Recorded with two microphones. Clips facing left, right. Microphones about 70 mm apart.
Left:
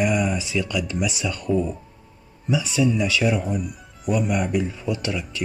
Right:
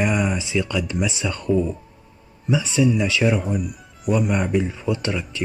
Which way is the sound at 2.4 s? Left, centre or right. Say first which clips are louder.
Right 2 dB; right.